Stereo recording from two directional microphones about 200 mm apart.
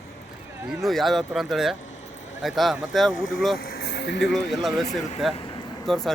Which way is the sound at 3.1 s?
40° left (ahead or behind).